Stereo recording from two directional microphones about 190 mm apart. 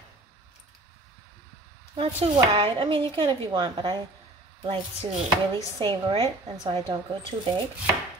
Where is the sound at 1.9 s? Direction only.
30° right (ahead or behind).